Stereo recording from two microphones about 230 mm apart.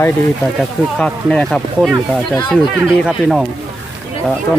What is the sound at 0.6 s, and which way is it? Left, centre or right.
Speech, centre.